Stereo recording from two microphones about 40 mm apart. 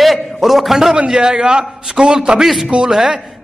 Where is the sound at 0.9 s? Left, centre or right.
Right.